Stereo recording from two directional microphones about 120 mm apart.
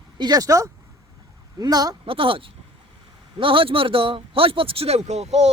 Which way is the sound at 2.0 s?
50° right (ahead or behind).